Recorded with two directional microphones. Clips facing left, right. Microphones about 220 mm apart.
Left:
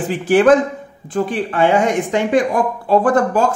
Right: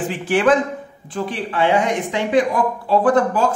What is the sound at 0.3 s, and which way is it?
A man's voice, 40° left (ahead or behind).